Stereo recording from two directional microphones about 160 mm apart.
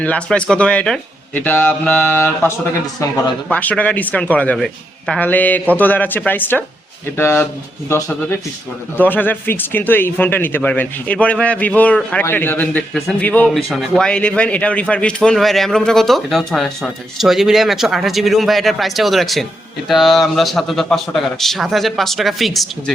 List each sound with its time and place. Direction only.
0.0 s speech: 10° left (ahead or behind)
3.5 s speech: 10° left (ahead or behind)